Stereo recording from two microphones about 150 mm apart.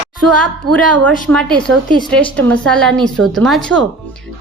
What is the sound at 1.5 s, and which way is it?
Speech, 30° right (ahead or behind).